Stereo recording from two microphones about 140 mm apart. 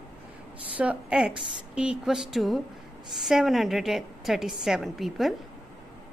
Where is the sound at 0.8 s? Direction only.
10° right (ahead or behind).